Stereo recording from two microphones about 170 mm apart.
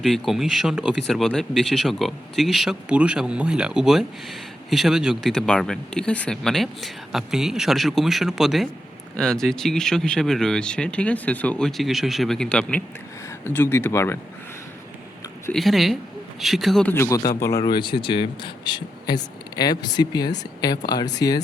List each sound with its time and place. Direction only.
0.0 s speech: centre (ahead or behind)
15.5 s speech: centre (ahead or behind)
16.9 s speech: 15° left (ahead or behind)